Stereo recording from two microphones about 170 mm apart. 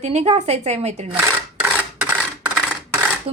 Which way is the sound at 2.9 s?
10° right (ahead or behind).